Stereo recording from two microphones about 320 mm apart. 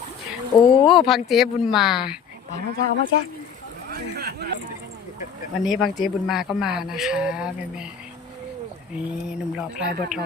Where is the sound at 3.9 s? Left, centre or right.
Right.